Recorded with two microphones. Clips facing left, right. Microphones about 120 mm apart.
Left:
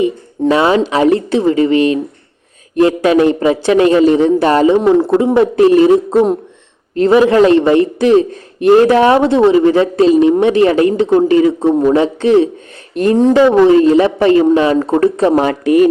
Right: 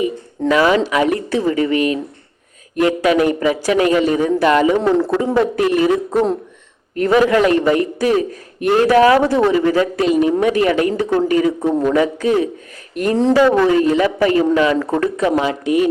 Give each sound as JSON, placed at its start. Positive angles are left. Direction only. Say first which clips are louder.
{"t": 0.4, "sound": "a man's voice", "louder": "left 3 dB", "side_deg": 30}
{"t": 4.7, "sound": "a man's voice", "louder": "left 5 dB", "side_deg": 20}
{"t": 5.5, "sound": "a man's voice", "louder": "left 7 dB", "side_deg": 30}
{"t": 15.4, "sound": "speech", "louder": "left 7 dB", "side_deg": 50}